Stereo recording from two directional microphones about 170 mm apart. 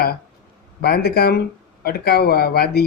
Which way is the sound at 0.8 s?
65° left (ahead or behind).